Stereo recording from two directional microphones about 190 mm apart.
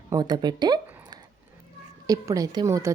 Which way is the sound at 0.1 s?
20° right (ahead or behind).